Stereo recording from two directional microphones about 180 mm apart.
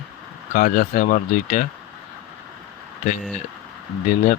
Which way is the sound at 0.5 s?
50° left (ahead or behind).